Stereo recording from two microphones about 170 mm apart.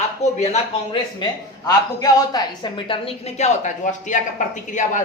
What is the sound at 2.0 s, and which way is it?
A woman's voice, 25° left (ahead or behind).